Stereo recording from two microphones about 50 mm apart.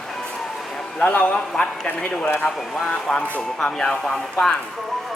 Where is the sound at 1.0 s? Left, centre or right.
Left.